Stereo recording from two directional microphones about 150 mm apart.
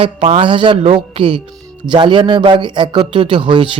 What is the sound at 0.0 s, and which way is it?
A man's voice, 40° right (ahead or behind).